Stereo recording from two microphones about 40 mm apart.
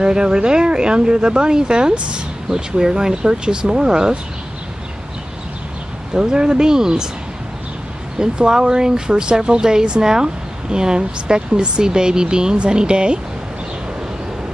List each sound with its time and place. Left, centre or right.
0.0 s speech: right
6.1 s speech: right
8.2 s speech: centre